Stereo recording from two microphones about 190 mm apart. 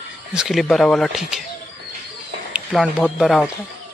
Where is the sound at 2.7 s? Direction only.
Centre (ahead or behind).